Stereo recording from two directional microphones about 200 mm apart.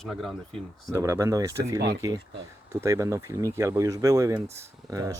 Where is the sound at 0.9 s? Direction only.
15° right (ahead or behind).